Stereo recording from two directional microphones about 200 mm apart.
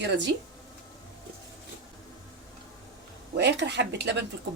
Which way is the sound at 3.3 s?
60° right (ahead or behind).